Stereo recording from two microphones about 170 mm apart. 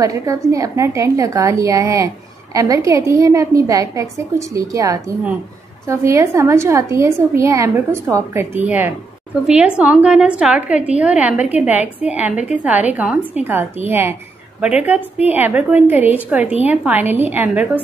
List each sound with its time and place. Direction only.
0.0 s a woman's voice: 20° right (ahead or behind)